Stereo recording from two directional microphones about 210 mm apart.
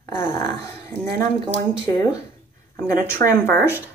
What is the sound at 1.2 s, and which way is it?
Speech, 15° left (ahead or behind).